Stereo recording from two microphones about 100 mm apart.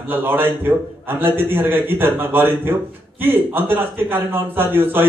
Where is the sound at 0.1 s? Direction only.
20° right (ahead or behind).